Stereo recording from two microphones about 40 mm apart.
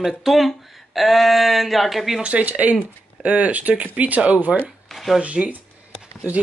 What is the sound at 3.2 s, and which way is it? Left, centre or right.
Speech, right.